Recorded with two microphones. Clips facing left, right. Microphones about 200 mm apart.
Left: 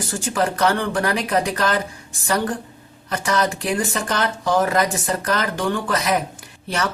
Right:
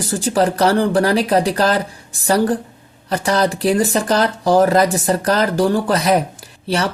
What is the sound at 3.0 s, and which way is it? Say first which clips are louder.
Speech: right 4 dB; 35° right (ahead or behind).